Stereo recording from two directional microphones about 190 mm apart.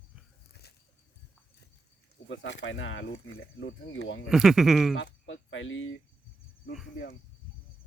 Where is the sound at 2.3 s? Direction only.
75° left (ahead or behind).